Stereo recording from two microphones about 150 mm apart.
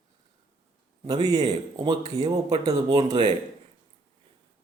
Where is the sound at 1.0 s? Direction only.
25° right (ahead or behind).